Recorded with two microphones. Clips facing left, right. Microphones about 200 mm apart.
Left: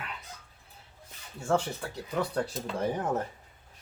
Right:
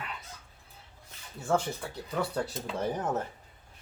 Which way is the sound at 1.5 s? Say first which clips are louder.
Left 1 dB; centre (ahead or behind).